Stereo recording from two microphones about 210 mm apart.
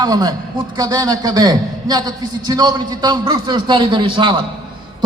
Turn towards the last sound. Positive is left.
turn(degrees=-20)  # may be behind; listen again after turning